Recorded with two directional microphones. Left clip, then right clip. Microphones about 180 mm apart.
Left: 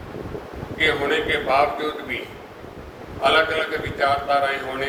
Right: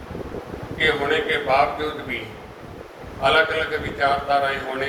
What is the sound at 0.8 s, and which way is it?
Speech, 35° left (ahead or behind).